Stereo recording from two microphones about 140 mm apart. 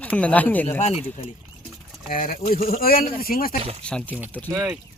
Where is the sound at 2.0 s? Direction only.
85° left.